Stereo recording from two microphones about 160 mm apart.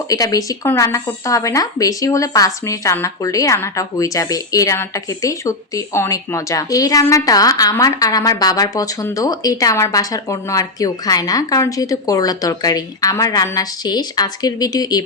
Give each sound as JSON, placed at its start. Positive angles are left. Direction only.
{"t": 0.1, "sound": "speech", "side_deg": 20}